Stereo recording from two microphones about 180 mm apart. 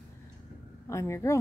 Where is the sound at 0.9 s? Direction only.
15° left (ahead or behind).